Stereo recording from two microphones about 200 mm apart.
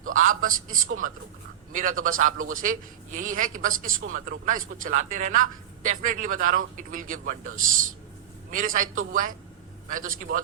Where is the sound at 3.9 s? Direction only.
85° right.